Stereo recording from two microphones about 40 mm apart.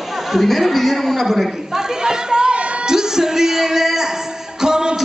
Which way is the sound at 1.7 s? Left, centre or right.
Centre.